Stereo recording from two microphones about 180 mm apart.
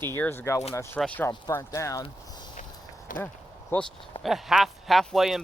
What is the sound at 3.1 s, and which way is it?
Speech, 45° left (ahead or behind).